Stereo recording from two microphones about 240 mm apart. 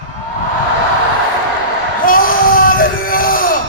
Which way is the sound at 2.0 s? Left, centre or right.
Left.